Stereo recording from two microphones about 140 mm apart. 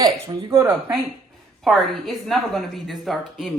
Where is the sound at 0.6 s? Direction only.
5° right (ahead or behind).